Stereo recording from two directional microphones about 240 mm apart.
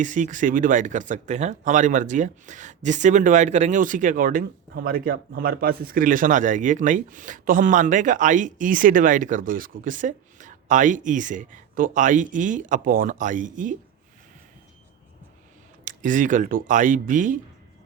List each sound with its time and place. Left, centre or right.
0.0 s a man's voice: right
15.8 s a man's voice: right